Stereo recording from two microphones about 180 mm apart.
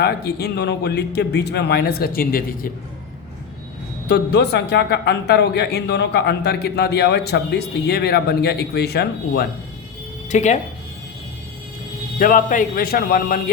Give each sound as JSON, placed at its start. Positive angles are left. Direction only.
{"t": 0.0, "sound": "speech", "side_deg": 65}
{"t": 4.1, "sound": "speech", "side_deg": 70}
{"t": 10.2, "sound": "speech", "side_deg": 40}
{"t": 12.2, "sound": "speech", "side_deg": 50}